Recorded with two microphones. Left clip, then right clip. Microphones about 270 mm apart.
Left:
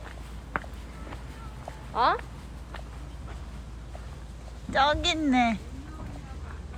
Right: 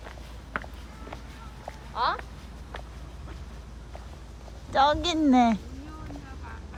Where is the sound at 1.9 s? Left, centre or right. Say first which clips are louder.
Left 3 dB; left.